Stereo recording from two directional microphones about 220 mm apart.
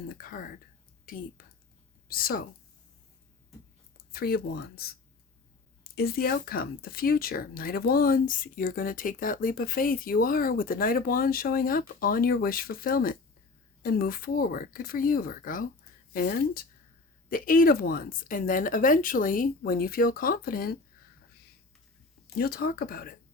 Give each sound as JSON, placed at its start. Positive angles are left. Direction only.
{"t": 0.1, "sound": "speech", "side_deg": 40}
{"t": 4.1, "sound": "speech", "side_deg": 45}
{"t": 22.4, "sound": "speech", "side_deg": 45}